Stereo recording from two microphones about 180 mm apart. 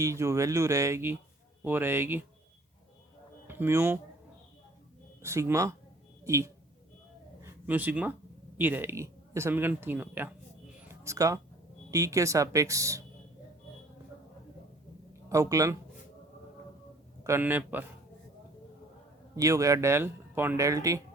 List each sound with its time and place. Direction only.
0.0 s speech: 15° right (ahead or behind)
3.4 s speech: 10° right (ahead or behind)
5.2 s a woman's voice: 15° right (ahead or behind)
10.8 s a sound: 15° right (ahead or behind)
11.9 s speech: 20° right (ahead or behind)
15.3 s speech: 20° right (ahead or behind)
17.2 s speech: 10° right (ahead or behind)
19.4 s speech: 20° right (ahead or behind)